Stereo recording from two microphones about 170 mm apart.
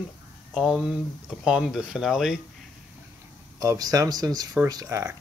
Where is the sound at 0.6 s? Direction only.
5° right (ahead or behind).